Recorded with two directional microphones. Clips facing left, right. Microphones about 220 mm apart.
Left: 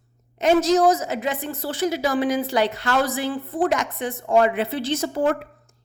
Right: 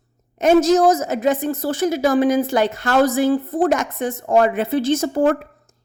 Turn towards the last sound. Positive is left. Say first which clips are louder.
# right 5 dB
turn(degrees=-45)  # may be behind; listen again after turning